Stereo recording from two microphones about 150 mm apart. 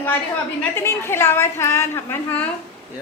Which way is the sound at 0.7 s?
15° left (ahead or behind).